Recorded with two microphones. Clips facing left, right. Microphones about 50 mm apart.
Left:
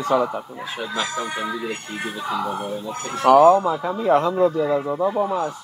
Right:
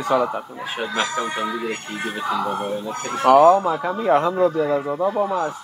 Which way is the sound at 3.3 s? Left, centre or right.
Centre.